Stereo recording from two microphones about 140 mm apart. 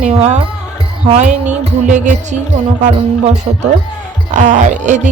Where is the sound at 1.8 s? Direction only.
65° right (ahead or behind).